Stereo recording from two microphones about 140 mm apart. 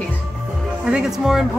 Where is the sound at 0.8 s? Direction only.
5° right (ahead or behind).